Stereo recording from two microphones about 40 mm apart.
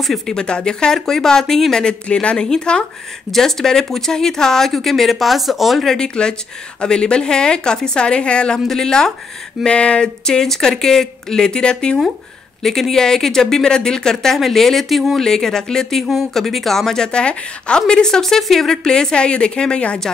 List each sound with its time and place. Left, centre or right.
0.3 s a woman's voice: left
3.3 s speech: centre
5.9 s a woman's voice: centre
8.6 s speech: centre
9.7 s a woman's voice: left
10.2 s speech: centre
12.6 s speech: centre
15.1 s speech: centre
18.2 s a woman's voice: centre; by 20.0 s left